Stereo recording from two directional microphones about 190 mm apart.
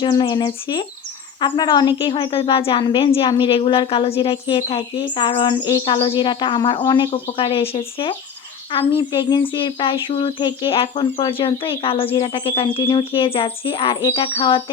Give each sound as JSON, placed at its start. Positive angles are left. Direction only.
{"t": 0.0, "sound": "speech", "side_deg": 25}